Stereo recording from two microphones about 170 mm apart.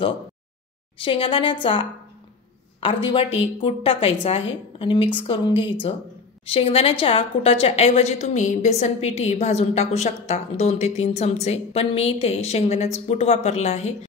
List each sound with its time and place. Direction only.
0.9 s a woman's voice: 30° left (ahead or behind)